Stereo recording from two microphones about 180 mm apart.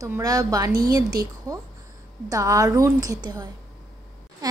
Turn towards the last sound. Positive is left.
turn(degrees=-20)  # may be behind; listen again after turning